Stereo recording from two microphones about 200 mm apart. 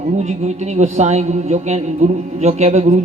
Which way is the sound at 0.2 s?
35° right (ahead or behind).